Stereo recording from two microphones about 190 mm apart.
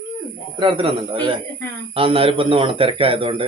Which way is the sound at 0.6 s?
25° right (ahead or behind).